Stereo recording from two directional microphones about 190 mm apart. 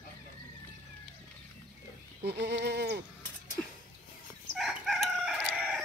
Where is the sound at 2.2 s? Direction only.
60° right (ahead or behind).